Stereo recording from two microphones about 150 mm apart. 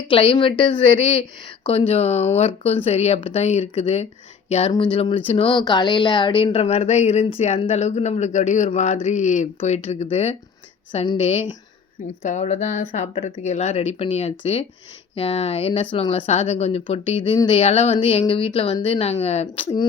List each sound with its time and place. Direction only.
0.1 s speech: 35° left (ahead or behind)
4.7 s speech: 35° left (ahead or behind)
17.6 s speech: 45° left (ahead or behind)